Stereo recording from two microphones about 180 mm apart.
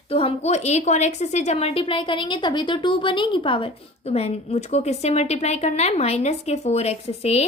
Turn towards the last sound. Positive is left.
turn(degrees=35)  # may be behind; listen again after turning